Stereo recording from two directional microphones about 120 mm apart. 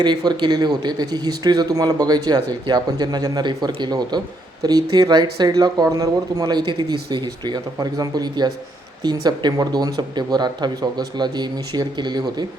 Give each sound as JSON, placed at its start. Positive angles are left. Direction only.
{"t": 0.0, "sound": "a man's voice", "side_deg": -40}